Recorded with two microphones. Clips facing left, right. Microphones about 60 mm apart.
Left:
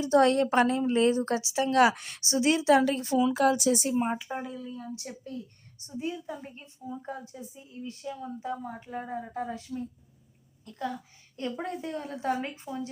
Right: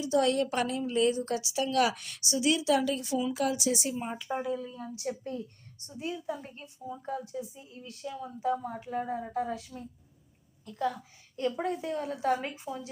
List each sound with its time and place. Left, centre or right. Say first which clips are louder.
0.0 s a woman's voice: left 4 dB; left
1.4 s a woman's voice: left 4 dB; left
4.3 s a woman's voice: right 3 dB; centre
4.7 s a woman's voice: right 2 dB; centre
5.8 s a woman's voice: left 1 dB; centre